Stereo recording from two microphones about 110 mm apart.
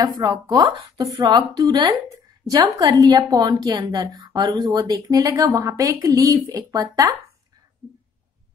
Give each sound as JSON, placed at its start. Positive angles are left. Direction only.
{"t": 0.0, "sound": "a woman's voice", "side_deg": -35}